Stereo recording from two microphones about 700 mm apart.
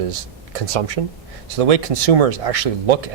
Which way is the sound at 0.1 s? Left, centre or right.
Right.